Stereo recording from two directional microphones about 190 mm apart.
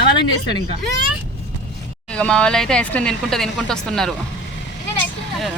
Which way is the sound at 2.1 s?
5° left (ahead or behind).